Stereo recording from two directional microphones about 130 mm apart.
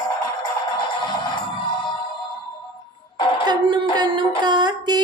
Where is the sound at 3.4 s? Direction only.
35° right (ahead or behind).